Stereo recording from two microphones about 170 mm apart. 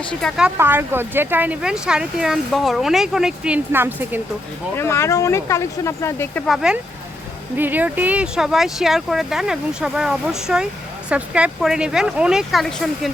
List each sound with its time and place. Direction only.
0.1 s speech: 5° left (ahead or behind)
0.5 s speech: 15° right (ahead or behind)
4.8 s speech: 15° left (ahead or behind)
6.4 s speech: 5° right (ahead or behind)